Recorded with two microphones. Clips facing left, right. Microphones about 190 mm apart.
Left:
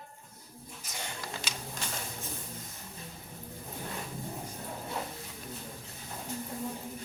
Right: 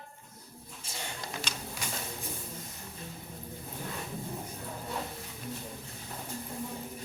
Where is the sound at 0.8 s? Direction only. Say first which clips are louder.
Right 1 dB; 30° right (ahead or behind).